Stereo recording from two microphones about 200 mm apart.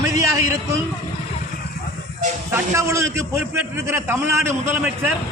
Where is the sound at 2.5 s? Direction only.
15° right (ahead or behind).